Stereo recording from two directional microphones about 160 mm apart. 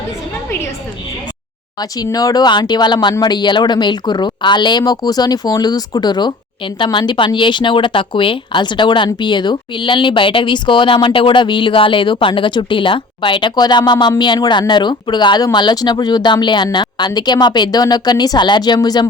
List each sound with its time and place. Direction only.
1.8 s speech: 25° left (ahead or behind)